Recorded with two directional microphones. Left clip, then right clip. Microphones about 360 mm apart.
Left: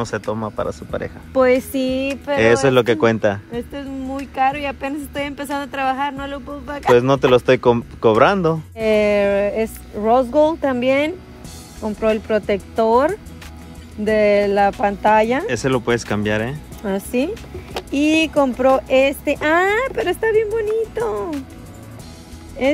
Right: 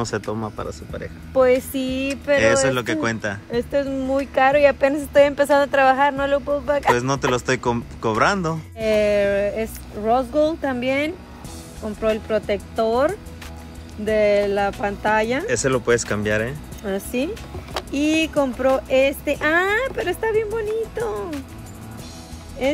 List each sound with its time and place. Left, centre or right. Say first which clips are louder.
0.0 s speech: left 2 dB; centre
1.3 s speech: left 1 dB; left; by 3.3 s centre
3.5 s speech: right 6 dB; centre
8.7 s speech: left 1 dB; centre
15.4 s speech: left 1 dB; centre
16.8 s speech: left 3 dB; centre
22.6 s speech: left 4 dB; centre